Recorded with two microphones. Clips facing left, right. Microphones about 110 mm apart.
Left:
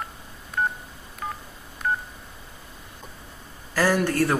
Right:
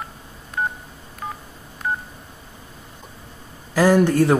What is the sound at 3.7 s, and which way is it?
Speech, 15° right (ahead or behind).